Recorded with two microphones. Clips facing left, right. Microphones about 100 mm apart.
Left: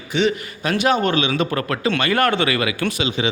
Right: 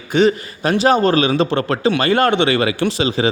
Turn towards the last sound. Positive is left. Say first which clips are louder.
# right 4 dB
turn(degrees=-35)  # may be behind; listen again after turning